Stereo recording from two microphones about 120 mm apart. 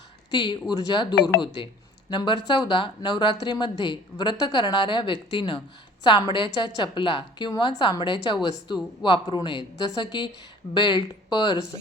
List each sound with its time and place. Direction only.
0.3 s speech: 40° left (ahead or behind)